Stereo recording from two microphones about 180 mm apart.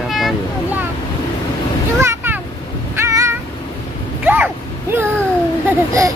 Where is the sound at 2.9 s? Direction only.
15° right (ahead or behind).